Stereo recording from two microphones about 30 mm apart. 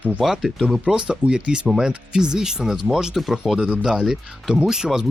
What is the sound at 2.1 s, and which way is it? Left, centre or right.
Speech, right.